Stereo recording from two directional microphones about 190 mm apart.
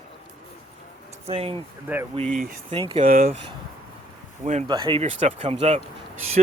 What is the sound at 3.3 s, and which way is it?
Speech, 30° right (ahead or behind).